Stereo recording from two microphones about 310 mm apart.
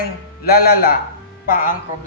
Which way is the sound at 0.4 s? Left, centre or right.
Left.